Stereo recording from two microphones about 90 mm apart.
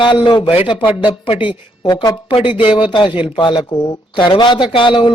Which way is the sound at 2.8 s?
65° left (ahead or behind).